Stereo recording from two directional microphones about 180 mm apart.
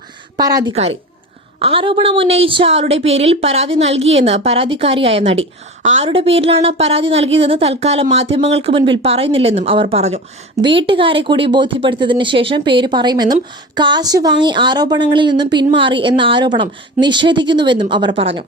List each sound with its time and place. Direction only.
0.3 s speech: 20° right (ahead or behind)
0.7 s a woman's voice: 35° right (ahead or behind)